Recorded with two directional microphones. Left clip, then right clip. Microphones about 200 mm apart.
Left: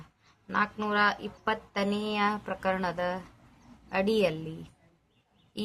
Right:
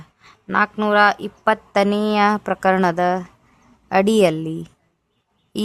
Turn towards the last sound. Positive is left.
turn(degrees=-60)  # may be behind; listen again after turning